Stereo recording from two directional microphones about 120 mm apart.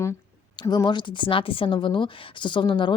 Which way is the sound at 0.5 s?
40° left (ahead or behind).